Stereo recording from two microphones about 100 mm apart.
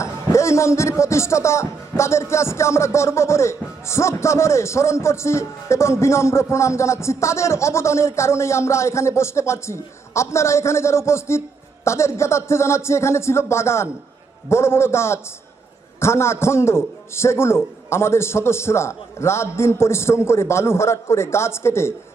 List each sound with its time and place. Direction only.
0.0 s speech: 30° left (ahead or behind)